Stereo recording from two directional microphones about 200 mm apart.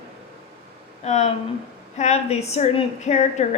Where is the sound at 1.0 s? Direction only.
35° left (ahead or behind).